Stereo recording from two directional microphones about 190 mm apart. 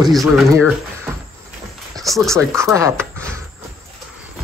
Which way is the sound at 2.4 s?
15° right (ahead or behind).